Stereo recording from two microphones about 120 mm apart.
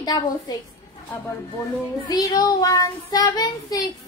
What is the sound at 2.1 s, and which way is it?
Child singing, 35° left (ahead or behind).